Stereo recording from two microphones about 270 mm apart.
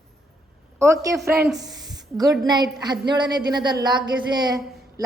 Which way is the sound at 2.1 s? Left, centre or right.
Centre.